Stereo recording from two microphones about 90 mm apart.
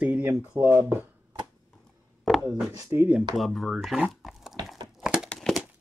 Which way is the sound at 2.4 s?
35° right (ahead or behind).